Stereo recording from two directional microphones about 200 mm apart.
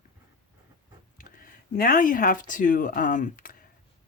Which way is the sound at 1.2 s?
45° left (ahead or behind).